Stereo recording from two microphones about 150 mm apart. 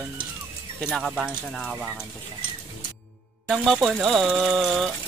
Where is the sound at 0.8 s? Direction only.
Centre (ahead or behind).